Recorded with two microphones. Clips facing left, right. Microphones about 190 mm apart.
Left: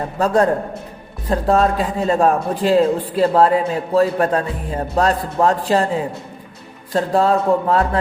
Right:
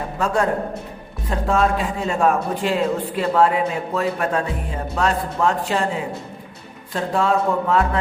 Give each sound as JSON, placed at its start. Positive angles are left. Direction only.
{"t": 0.2, "sound": "a man's voice", "side_deg": 35}
{"t": 6.9, "sound": "a man's voice", "side_deg": 35}